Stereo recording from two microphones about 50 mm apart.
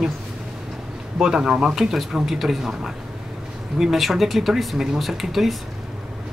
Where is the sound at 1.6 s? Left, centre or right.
Centre.